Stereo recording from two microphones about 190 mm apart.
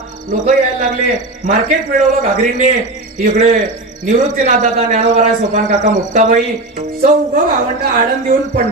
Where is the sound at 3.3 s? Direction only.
40° right (ahead or behind).